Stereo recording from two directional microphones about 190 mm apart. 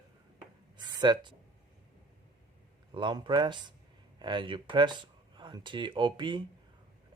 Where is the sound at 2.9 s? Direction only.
25° right (ahead or behind).